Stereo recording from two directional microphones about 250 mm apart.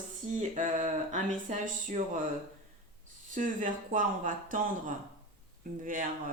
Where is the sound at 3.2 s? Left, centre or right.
Right.